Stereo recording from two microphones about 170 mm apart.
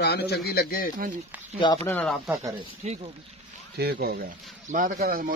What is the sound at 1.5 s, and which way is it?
Speech, 25° left (ahead or behind).